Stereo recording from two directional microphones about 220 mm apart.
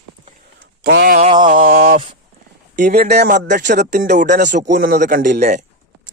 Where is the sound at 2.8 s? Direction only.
45° right (ahead or behind).